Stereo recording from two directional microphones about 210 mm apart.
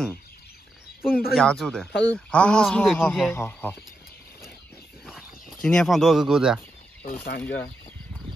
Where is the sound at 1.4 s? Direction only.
5° left (ahead or behind).